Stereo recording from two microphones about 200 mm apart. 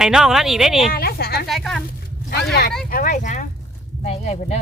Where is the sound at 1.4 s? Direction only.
Centre (ahead or behind).